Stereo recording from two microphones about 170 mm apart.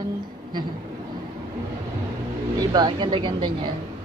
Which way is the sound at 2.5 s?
25° right (ahead or behind).